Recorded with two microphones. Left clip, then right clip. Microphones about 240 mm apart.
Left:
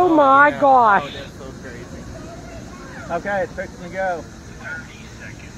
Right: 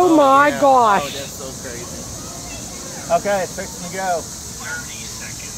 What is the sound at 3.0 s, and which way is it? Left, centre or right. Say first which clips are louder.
Speech: right 5 dB; right.